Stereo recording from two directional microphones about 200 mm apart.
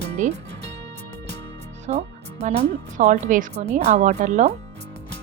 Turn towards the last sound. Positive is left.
turn(degrees=-35)  # may be behind; listen again after turning